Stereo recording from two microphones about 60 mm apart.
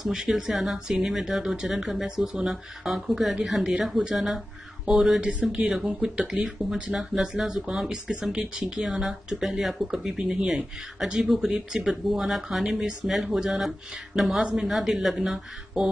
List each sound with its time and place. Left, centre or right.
0.0 s speech: centre
5.2 s speech: centre